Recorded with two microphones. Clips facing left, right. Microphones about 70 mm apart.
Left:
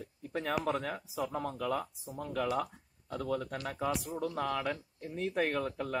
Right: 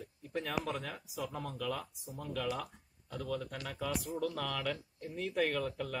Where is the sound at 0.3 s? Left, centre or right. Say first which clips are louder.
Left 4 dB; left.